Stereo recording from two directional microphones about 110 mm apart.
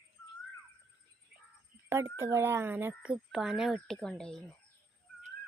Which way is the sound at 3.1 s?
5° right (ahead or behind).